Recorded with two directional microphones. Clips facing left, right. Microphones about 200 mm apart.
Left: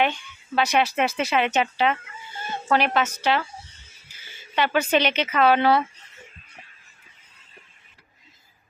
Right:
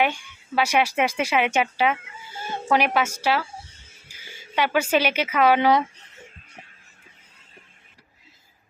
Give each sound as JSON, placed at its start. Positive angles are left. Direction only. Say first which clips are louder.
{"t": 0.0, "sound": "speech", "louder": "even", "side_deg": -10}